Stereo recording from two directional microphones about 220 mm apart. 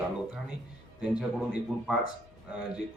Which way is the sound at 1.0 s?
5° right (ahead or behind).